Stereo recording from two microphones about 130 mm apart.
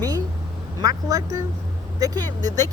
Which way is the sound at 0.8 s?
30° right (ahead or behind).